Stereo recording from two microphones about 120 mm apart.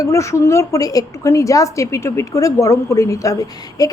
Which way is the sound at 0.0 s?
25° left (ahead or behind).